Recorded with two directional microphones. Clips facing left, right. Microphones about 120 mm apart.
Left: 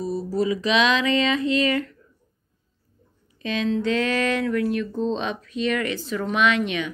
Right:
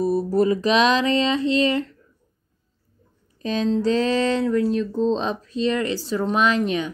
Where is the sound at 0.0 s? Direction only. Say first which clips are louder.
Right 5 dB; 55° right (ahead or behind); by 2.0 s 30° right (ahead or behind).